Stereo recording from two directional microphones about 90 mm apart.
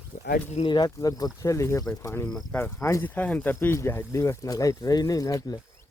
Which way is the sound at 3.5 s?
30° left (ahead or behind).